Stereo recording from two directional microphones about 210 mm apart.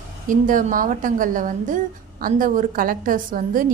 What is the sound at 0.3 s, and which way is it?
A woman's voice, 40° right (ahead or behind).